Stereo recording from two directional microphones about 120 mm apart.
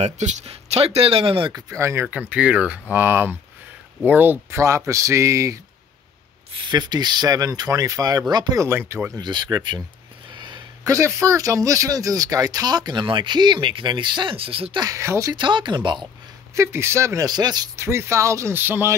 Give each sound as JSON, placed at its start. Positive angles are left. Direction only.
{"t": 0.0, "sound": "speech", "side_deg": -70}
{"t": 1.5, "sound": "speech", "side_deg": -25}
{"t": 6.5, "sound": "speech", "side_deg": -40}
{"t": 8.6, "sound": "speech", "side_deg": -20}
{"t": 9.2, "sound": "speech", "side_deg": -35}
{"t": 14.8, "sound": "speech", "side_deg": -25}
{"t": 15.3, "sound": "speech", "side_deg": -40}
{"t": 16.5, "sound": "speech", "side_deg": -20}
{"t": 17.7, "sound": "speech", "side_deg": -20}